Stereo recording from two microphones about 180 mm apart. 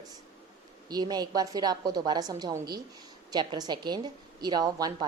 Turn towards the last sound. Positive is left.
turn(degrees=-20)  # may be behind; listen again after turning